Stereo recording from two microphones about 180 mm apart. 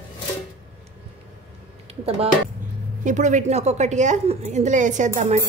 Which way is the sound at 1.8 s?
35° right (ahead or behind).